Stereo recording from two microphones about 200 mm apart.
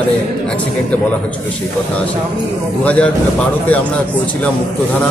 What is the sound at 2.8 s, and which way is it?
Speech, 5° left (ahead or behind).